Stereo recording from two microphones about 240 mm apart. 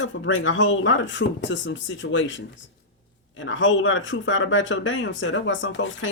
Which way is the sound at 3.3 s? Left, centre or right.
Left.